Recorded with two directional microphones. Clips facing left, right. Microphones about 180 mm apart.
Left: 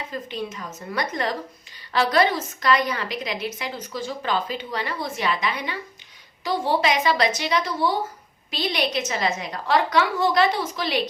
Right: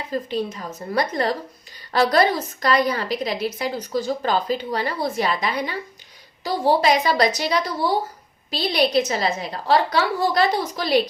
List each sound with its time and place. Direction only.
0.1 s a woman's voice: 35° right (ahead or behind)